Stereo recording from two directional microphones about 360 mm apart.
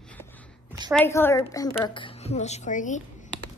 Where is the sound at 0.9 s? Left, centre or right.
Centre.